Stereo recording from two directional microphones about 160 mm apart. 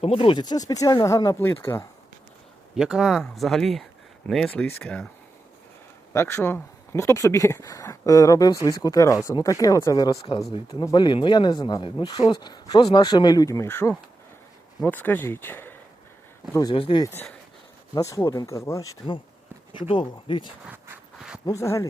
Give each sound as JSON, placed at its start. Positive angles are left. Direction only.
{"t": 0.0, "sound": "speech", "side_deg": 35}
{"t": 2.7, "sound": "speech", "side_deg": -5}
{"t": 6.1, "sound": "speech", "side_deg": 15}
{"t": 10.2, "sound": "speech", "side_deg": 40}
{"t": 16.7, "sound": "speech", "side_deg": 35}
{"t": 17.0, "sound": "speech", "side_deg": 15}
{"t": 20.7, "sound": "a sound", "side_deg": -5}
{"t": 21.4, "sound": "speech", "side_deg": 20}